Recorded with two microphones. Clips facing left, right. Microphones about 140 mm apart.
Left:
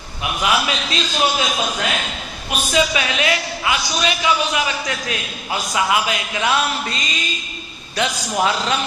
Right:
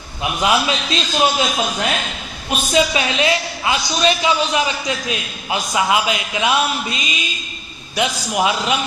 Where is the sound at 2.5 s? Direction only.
30° right (ahead or behind).